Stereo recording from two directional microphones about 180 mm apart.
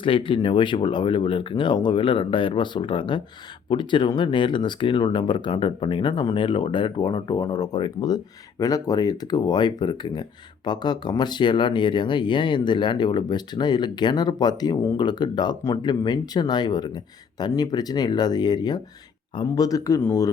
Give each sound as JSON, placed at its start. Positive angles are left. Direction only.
{"t": 0.0, "sound": "speech", "side_deg": 30}